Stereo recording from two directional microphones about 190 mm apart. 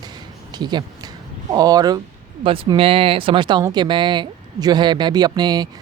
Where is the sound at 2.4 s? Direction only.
30° right (ahead or behind).